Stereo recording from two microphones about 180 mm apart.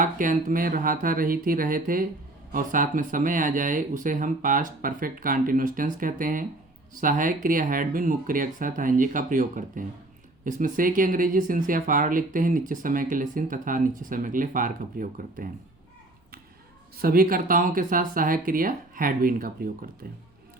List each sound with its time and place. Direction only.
0.0 s speech: 45° right (ahead or behind)
17.0 s speech: 55° right (ahead or behind)